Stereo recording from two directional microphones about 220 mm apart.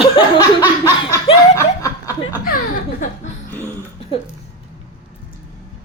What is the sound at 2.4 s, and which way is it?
Laughter, 40° left (ahead or behind).